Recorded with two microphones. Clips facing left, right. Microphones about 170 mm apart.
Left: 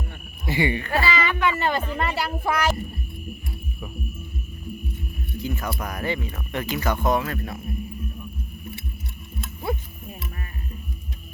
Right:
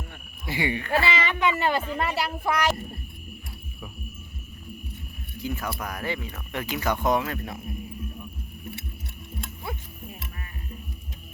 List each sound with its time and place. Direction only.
0.4 s insect: 10° right (ahead or behind)
1.0 s speech: 25° right (ahead or behind); by 2.7 s centre (ahead or behind)
5.4 s speech: 10° right (ahead or behind)